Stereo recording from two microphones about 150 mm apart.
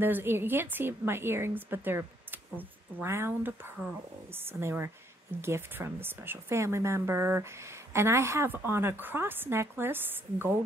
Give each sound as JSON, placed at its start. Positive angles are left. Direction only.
{"t": 0.0, "sound": "a woman's voice", "side_deg": -15}